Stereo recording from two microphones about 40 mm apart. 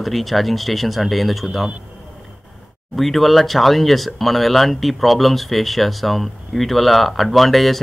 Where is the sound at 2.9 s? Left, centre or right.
Centre.